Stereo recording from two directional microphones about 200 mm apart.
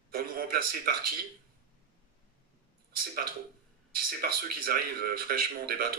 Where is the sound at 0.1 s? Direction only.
45° right (ahead or behind).